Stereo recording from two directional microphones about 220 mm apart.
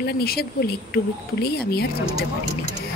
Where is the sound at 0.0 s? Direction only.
45° left (ahead or behind).